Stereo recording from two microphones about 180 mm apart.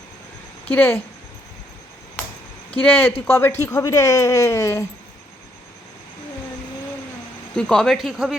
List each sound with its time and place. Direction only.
0.7 s speech: 10° left (ahead or behind)
2.7 s speech: 10° left (ahead or behind)
7.5 s speech: 5° left (ahead or behind)